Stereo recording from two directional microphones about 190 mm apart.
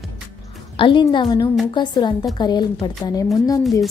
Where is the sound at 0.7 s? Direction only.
25° left (ahead or behind).